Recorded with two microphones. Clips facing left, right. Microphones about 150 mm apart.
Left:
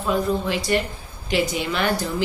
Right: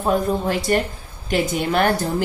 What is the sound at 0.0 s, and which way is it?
Speech, 45° right (ahead or behind).